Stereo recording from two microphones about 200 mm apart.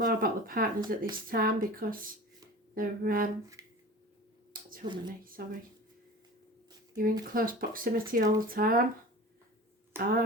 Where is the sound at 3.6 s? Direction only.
15° right (ahead or behind).